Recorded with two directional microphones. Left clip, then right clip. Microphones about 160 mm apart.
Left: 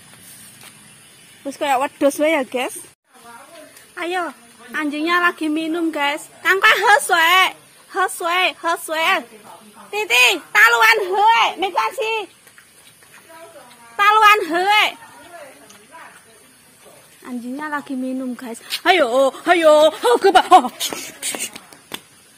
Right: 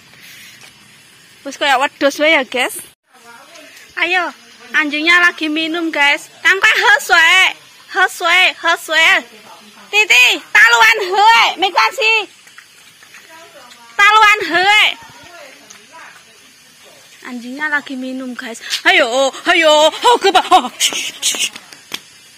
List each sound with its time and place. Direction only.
1.4 s speech: 5° left (ahead or behind)
3.9 s speech: 5° left (ahead or behind)
9.8 s speech: 10° right (ahead or behind)
11.0 s speech: 15° right (ahead or behind)
13.9 s a woman's voice: centre (ahead or behind)
17.6 s speech: 5° left (ahead or behind)